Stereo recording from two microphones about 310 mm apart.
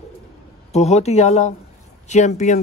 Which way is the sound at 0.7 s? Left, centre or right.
Left.